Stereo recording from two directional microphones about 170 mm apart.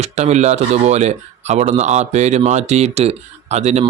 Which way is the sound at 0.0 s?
40° right (ahead or behind).